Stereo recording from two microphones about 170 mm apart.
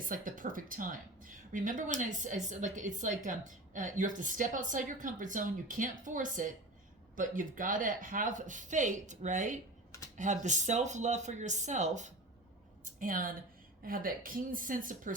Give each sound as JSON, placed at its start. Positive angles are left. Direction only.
{"t": 0.1, "sound": "a woman's voice", "side_deg": -50}